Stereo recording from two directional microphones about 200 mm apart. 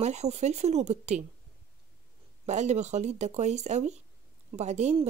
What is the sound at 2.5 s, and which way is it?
Speech, 35° right (ahead or behind).